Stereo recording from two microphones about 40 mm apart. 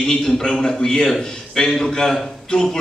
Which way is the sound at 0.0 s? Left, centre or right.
Centre.